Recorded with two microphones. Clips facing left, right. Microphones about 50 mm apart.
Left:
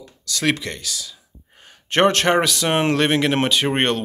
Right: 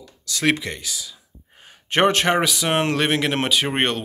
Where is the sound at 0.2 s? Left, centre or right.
Centre.